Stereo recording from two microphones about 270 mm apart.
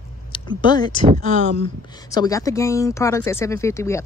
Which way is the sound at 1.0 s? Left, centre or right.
Right.